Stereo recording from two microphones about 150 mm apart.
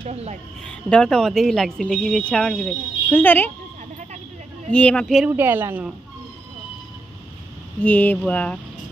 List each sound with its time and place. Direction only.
0.0 s speech: 45° right (ahead or behind)
0.7 s a woman's voice: 5° left (ahead or behind)
4.6 s speech: 10° left (ahead or behind)
5.3 s speech: 15° right (ahead or behind)
7.8 s speech: 10° left (ahead or behind)